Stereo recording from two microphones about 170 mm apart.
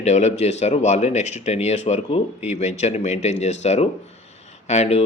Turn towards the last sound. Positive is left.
turn(degrees=40)  # may be behind; listen again after turning